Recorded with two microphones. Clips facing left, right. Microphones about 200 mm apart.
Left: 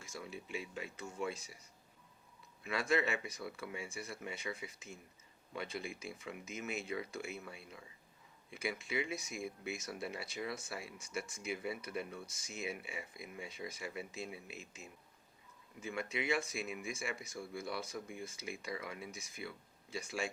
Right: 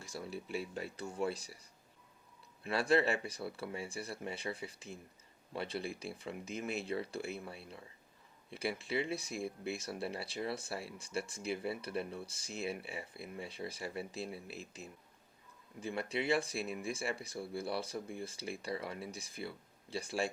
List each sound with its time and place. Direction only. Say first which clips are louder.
0.0 s speech: right 4 dB; 35° right (ahead or behind)
2.6 s speech: right 4 dB; 30° right (ahead or behind)